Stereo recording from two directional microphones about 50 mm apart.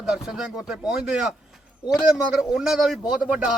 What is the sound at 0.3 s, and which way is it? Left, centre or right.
Speech, centre.